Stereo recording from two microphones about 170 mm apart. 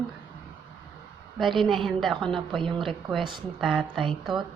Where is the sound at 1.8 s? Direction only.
Centre (ahead or behind).